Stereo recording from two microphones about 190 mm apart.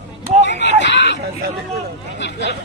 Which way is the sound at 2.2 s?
70° left (ahead or behind).